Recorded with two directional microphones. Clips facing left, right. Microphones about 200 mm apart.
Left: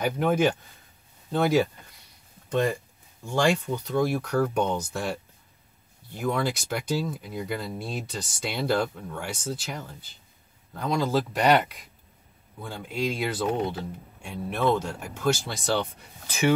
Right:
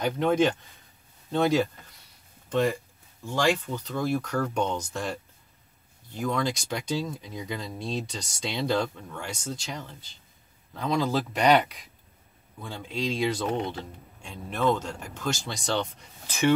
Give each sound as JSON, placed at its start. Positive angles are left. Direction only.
{"t": 0.0, "sound": "speech", "side_deg": 10}
{"t": 3.5, "sound": "speech", "side_deg": 10}